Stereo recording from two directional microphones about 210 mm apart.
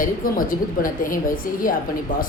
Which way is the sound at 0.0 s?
40° left (ahead or behind).